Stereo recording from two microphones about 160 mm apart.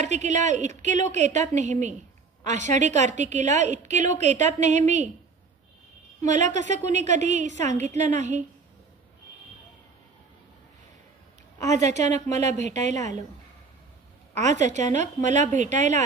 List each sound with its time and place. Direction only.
0.0 s a woman's voice: 45° right (ahead or behind)
6.2 s a woman's voice: 50° right (ahead or behind)
11.6 s a woman's voice: 45° right (ahead or behind)
14.3 s a woman's voice: 45° right (ahead or behind)